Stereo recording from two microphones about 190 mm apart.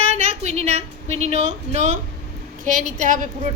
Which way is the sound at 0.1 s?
35° right (ahead or behind).